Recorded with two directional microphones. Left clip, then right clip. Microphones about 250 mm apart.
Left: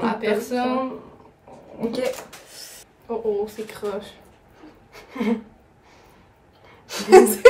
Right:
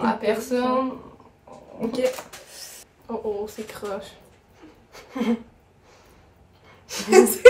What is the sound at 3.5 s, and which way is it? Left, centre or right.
Speech, centre.